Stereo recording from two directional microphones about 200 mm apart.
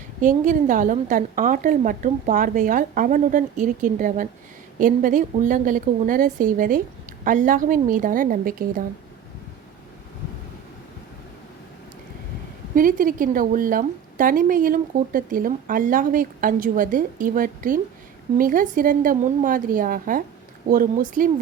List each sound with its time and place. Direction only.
0.2 s a woman's voice: 40° right (ahead or behind)
12.7 s a woman's voice: 45° right (ahead or behind)